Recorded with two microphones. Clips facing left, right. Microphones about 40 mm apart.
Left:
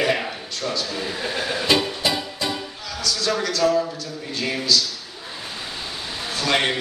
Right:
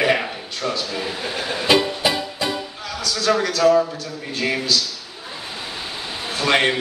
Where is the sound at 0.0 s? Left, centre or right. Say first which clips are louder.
Right 3 dB; right.